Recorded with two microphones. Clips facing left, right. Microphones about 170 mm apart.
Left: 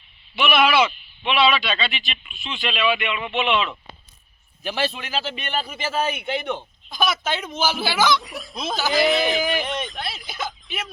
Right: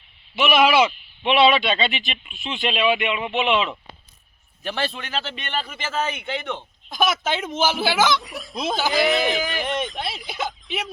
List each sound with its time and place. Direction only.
0.3 s a man's voice: 10° right (ahead or behind)
4.6 s a man's voice: 5° left (ahead or behind)
6.9 s a man's voice: 20° right (ahead or behind)
8.2 s speech: centre (ahead or behind)